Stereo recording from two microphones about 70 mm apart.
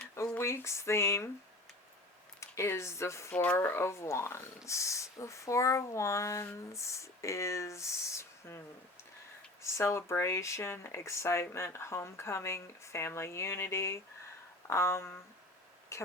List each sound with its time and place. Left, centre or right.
0.3 s speech: left
2.4 s speech: left
3.3 s speech: left
3.7 s speech: left
9.6 s speech: left